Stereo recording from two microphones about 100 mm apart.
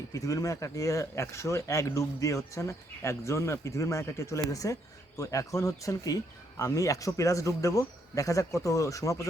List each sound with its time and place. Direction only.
0.1 s speech: 35° left (ahead or behind)